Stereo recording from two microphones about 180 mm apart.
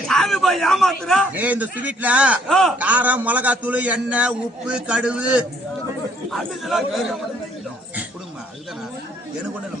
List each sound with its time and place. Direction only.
0.0 s a man's voice: centre (ahead or behind)
1.4 s a man's voice: 10° right (ahead or behind)
2.7 s a man's voice: 10° right (ahead or behind)